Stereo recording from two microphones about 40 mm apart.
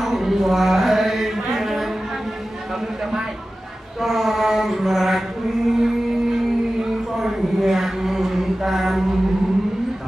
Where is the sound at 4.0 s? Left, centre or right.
Centre.